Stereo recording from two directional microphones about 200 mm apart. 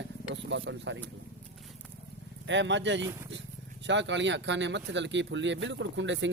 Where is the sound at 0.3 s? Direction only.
65° right (ahead or behind).